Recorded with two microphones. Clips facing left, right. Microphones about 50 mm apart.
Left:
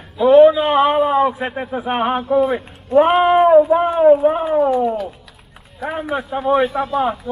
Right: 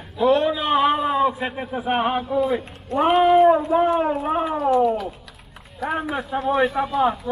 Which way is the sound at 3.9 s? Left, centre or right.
Centre.